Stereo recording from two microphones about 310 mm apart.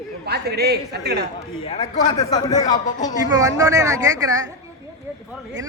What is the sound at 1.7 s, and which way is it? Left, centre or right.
A man's voice, centre.